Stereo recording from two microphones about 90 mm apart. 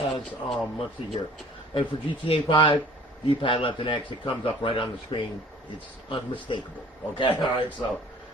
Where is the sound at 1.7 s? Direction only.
75° left (ahead or behind).